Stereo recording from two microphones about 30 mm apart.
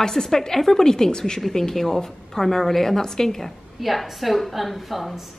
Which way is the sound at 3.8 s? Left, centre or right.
Centre.